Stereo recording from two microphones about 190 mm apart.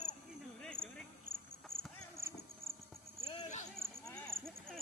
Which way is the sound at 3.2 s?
35° left (ahead or behind).